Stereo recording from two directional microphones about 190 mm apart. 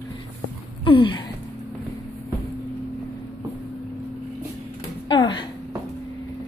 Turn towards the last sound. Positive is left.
turn(degrees=25)  # may be behind; listen again after turning